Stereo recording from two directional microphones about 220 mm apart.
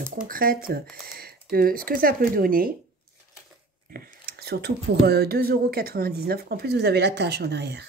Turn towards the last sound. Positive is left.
turn(degrees=-50)  # may be behind; listen again after turning